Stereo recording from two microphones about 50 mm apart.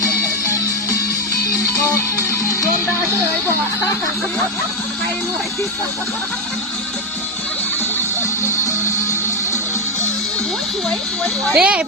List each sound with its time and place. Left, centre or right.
11.5 s speech: right